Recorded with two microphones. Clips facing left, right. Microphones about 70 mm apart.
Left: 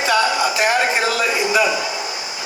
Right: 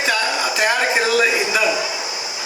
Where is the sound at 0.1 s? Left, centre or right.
Left.